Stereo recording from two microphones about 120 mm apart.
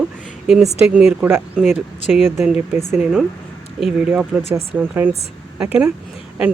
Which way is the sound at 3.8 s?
5° right (ahead or behind).